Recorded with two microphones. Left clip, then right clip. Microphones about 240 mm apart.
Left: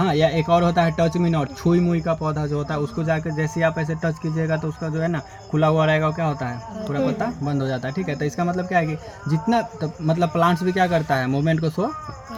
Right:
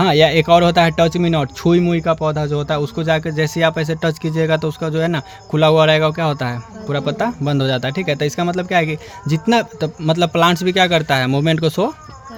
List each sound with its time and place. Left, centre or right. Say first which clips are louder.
0.0 s speech: right 7 dB; right